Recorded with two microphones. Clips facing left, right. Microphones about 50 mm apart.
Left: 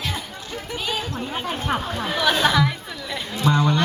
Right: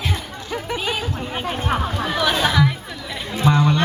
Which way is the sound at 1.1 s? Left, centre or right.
Centre.